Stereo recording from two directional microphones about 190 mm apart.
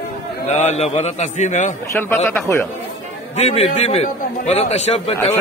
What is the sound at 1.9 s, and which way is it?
Speech, 10° left (ahead or behind).